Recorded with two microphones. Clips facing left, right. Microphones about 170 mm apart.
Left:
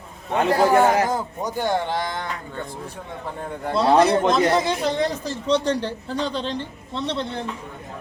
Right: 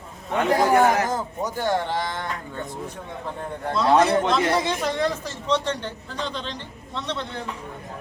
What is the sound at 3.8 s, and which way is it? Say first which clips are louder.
Speech: left 2 dB; 35° left (ahead or behind).